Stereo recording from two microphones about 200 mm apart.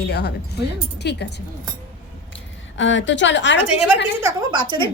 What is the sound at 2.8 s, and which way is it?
Speech, 65° left (ahead or behind).